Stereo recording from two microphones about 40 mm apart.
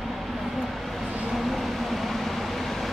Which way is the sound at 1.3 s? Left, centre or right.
Centre.